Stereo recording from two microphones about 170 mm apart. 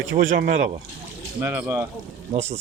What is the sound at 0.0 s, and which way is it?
Speech, 85° right.